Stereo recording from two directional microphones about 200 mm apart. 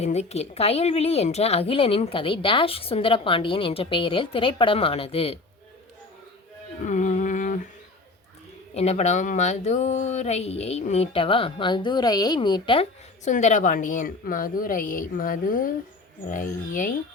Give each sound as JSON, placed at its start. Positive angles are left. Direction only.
{"t": 0.0, "sound": "a woman's voice", "side_deg": 35}
{"t": 6.8, "sound": "a sound", "side_deg": 40}
{"t": 8.7, "sound": "speech", "side_deg": 30}